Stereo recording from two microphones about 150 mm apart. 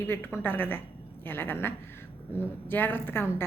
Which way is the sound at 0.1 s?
15° left (ahead or behind).